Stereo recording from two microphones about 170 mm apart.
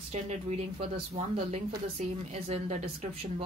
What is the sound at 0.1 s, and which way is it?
Speech, 40° right (ahead or behind).